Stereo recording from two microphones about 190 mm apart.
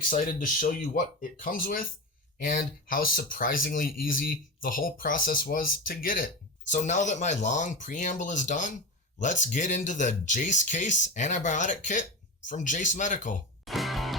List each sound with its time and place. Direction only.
0.1 s speech: 45° left (ahead or behind)
13.7 s music: centre (ahead or behind)